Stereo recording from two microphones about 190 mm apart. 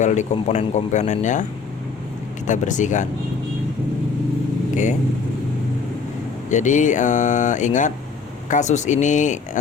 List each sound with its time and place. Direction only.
0.0 s speech: 40° left (ahead or behind)
2.5 s speech: 40° left (ahead or behind)
4.7 s speech: 40° left (ahead or behind)
6.5 s speech: 40° left (ahead or behind)